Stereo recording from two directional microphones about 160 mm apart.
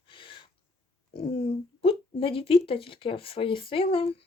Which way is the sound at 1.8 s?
35° left (ahead or behind).